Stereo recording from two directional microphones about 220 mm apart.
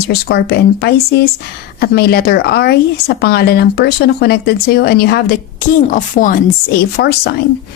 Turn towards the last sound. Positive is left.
turn(degrees=45)  # may be behind; listen again after turning